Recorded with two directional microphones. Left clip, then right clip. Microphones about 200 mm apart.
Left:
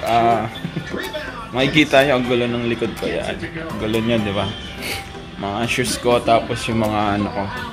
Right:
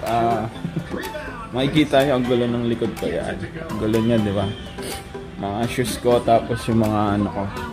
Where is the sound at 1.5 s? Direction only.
10° right (ahead or behind).